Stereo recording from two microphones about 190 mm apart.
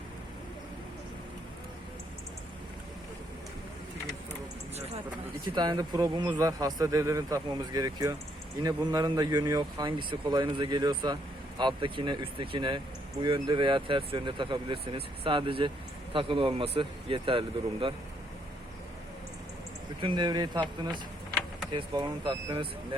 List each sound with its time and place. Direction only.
5.5 s a man's voice: 20° right (ahead or behind)
20.0 s a man's voice: 25° right (ahead or behind)